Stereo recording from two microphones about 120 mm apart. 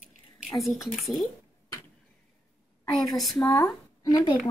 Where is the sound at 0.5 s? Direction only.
Centre (ahead or behind).